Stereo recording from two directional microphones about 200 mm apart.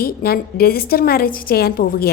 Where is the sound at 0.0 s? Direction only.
50° left (ahead or behind).